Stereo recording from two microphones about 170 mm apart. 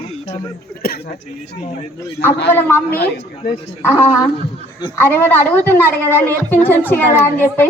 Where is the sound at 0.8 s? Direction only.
60° left (ahead or behind).